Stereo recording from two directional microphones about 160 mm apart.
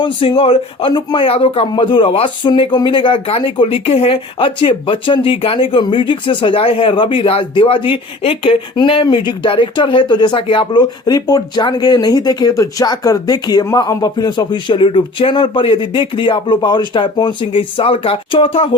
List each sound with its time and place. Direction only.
0.0 s speech: 35° left (ahead or behind)